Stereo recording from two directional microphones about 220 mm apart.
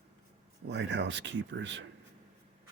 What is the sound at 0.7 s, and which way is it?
Speech, 50° right (ahead or behind).